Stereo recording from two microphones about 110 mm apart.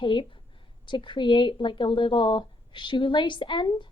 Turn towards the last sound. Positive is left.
turn(degrees=45)  # may be behind; listen again after turning